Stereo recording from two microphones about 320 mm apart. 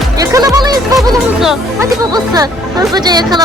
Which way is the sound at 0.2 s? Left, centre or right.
Centre.